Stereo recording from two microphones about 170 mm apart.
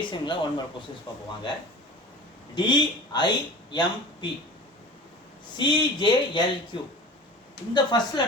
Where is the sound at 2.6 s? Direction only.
25° left (ahead or behind).